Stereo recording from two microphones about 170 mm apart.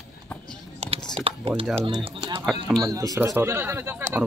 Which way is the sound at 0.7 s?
35° right (ahead or behind).